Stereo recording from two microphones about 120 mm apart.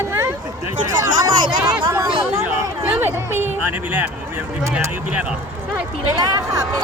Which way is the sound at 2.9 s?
20° right (ahead or behind).